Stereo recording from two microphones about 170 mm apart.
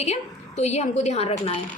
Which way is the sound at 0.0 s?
40° left (ahead or behind).